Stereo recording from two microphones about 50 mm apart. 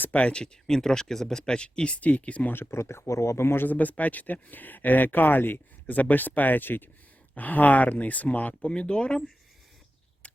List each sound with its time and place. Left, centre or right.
0.1 s speech: left
2.5 s speech: left
3.7 s speech: left